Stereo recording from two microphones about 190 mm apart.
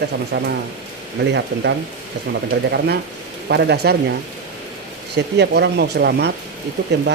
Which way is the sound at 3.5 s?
60° right (ahead or behind).